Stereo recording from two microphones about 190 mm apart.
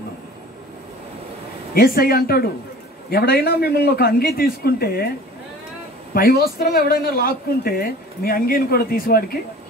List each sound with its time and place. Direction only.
1.7 s a man's voice: 50° left (ahead or behind)
6.1 s speech: 50° left (ahead or behind)